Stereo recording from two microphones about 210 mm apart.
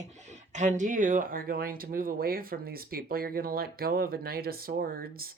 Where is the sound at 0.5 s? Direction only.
35° right (ahead or behind).